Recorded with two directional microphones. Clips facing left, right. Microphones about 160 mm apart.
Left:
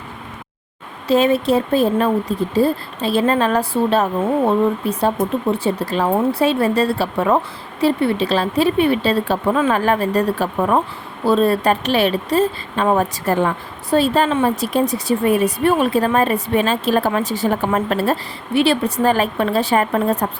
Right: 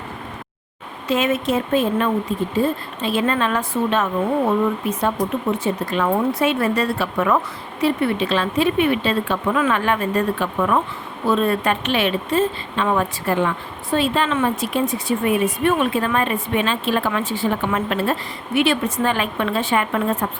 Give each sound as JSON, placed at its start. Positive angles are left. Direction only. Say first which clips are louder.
{"t": 1.0, "sound": "speech", "louder": "left 5 dB", "side_deg": 35}